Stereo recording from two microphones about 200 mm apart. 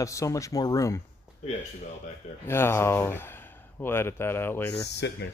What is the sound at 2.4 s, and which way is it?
Speech, 10° left (ahead or behind).